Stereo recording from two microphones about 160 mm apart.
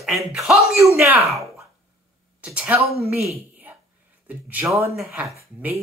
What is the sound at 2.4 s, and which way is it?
Speech, 10° right (ahead or behind).